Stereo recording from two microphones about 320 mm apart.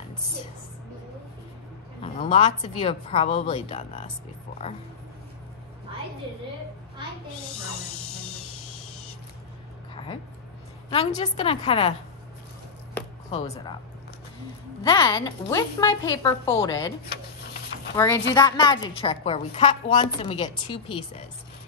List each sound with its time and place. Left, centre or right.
2.1 s a woman's voice: centre
10.9 s a woman's voice: centre
13.3 s a woman's voice: centre
14.8 s a woman's voice: centre
17.9 s a woman's voice: centre